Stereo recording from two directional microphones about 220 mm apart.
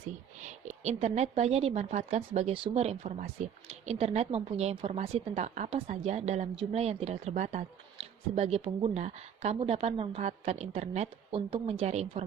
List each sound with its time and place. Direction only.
0.4 s speech: 30° right (ahead or behind)